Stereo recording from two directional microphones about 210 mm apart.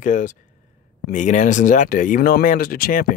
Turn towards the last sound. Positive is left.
turn(degrees=40)  # may be behind; listen again after turning